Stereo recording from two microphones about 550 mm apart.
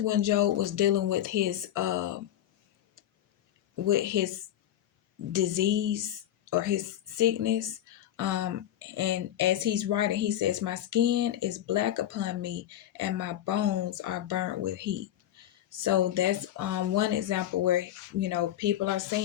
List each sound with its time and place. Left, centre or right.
0.0 s speech: right
3.8 s speech: right